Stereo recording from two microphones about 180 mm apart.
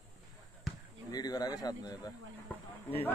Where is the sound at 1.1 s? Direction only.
20° left (ahead or behind).